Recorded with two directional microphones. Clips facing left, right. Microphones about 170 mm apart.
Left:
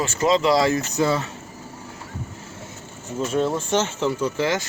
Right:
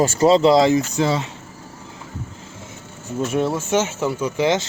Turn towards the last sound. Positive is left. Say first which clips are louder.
# right 3 dB
turn(degrees=-20)  # may be behind; listen again after turning